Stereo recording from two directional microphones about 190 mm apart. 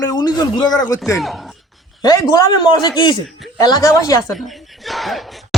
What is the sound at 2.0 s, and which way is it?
Speech, 20° left (ahead or behind).